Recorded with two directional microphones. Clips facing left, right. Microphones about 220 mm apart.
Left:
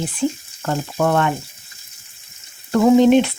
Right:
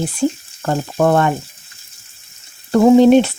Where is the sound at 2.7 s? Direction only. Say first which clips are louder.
Right 3 dB; 35° right (ahead or behind).